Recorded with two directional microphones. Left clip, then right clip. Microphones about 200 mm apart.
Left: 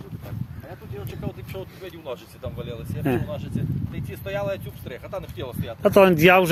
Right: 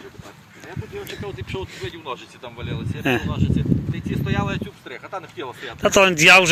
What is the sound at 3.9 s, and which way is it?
Speech, 45° left (ahead or behind).